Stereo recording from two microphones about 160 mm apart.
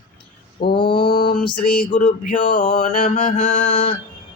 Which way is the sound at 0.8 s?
30° left (ahead or behind).